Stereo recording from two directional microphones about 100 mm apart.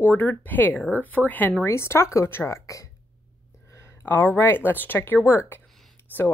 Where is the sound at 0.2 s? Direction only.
20° left (ahead or behind).